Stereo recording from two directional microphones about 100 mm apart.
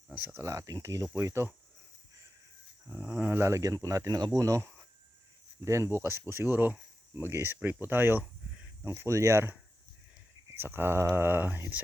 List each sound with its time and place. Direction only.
0.1 s speech: 10° right (ahead or behind)
0.4 s speech: 30° right (ahead or behind)
2.9 s speech: 25° right (ahead or behind)